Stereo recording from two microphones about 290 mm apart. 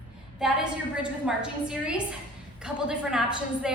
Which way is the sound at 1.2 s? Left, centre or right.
Centre.